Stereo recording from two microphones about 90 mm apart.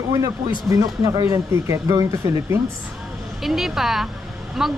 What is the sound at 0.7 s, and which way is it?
Speech, 40° right (ahead or behind).